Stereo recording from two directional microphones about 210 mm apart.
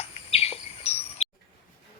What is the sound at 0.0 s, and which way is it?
Bird vocalization, 30° left (ahead or behind).